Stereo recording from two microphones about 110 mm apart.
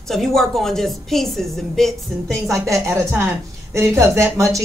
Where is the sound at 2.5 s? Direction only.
25° right (ahead or behind).